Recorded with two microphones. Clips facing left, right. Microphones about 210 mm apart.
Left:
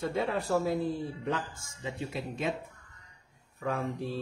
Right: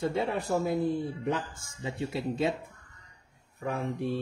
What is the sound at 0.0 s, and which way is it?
Speech, 25° right (ahead or behind).